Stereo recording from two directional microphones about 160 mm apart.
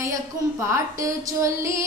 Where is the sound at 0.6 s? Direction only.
20° right (ahead or behind).